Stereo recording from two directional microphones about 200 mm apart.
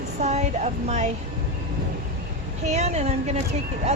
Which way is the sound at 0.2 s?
35° right (ahead or behind).